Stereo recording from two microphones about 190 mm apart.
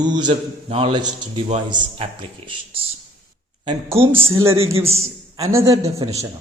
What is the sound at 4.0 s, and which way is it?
Speech, 30° right (ahead or behind).